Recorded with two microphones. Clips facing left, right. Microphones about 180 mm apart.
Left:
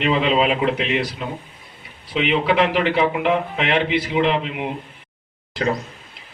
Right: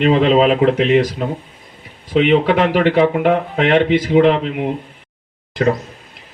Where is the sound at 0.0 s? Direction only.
45° right (ahead or behind).